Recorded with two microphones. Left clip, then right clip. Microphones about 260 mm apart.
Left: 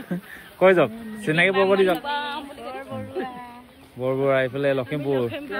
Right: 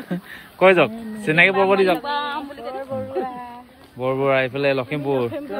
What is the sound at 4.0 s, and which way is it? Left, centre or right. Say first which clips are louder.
Speech: right 2 dB; centre.